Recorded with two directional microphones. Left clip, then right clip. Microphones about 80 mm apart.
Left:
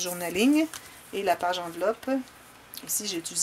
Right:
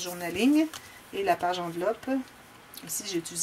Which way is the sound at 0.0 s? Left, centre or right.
Left.